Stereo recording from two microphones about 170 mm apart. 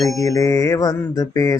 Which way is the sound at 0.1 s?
20° left (ahead or behind).